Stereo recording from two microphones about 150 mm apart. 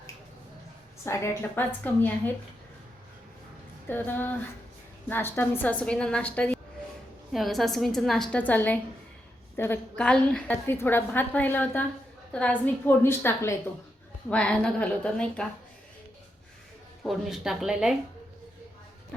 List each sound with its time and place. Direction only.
1.0 s a woman's voice: 20° left (ahead or behind)
3.8 s a woman's voice: 15° left (ahead or behind)
17.0 s a woman's voice: centre (ahead or behind)